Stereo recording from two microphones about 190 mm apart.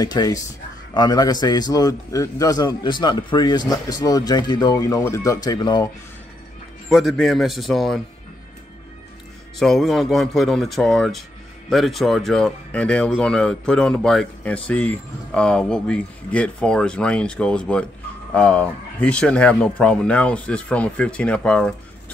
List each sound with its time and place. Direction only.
0.0 s a man's voice: 20° left (ahead or behind)
6.9 s speech: centre (ahead or behind)
9.6 s speech: centre (ahead or behind)